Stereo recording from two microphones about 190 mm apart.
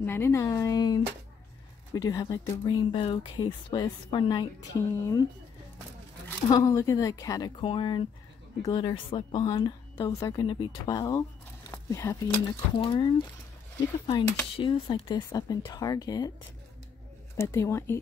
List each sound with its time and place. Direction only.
0.0 s speech: 10° left (ahead or behind)
6.2 s speech: 20° left (ahead or behind)
12.7 s speech: 25° left (ahead or behind)
17.4 s speech: 15° left (ahead or behind)